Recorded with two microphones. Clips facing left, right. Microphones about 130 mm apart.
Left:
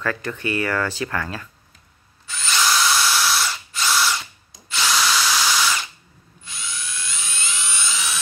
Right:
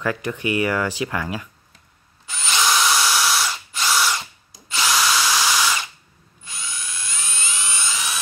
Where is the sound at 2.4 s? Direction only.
20° right (ahead or behind).